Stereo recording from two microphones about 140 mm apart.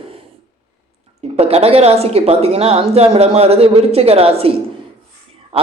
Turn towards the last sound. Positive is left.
turn(degrees=-45)  # may be behind; listen again after turning